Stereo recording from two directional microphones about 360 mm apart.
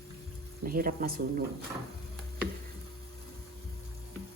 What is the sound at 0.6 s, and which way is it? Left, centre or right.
Speech, right.